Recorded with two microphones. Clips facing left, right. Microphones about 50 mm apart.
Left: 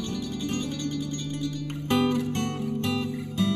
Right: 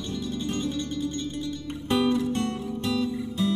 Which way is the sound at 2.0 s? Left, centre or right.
Left.